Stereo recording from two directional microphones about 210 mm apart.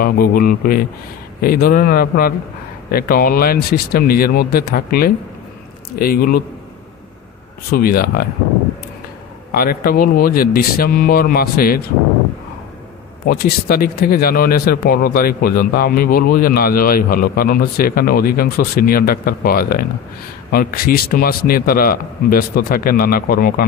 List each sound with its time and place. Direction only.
0.0 s speech: 45° left (ahead or behind)
7.7 s speech: 45° left (ahead or behind)
9.5 s speech: 45° left (ahead or behind)
13.3 s speech: 45° left (ahead or behind)